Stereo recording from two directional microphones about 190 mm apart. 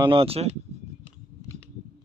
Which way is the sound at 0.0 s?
25° right (ahead or behind).